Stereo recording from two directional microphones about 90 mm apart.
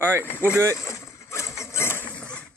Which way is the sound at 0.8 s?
35° left (ahead or behind).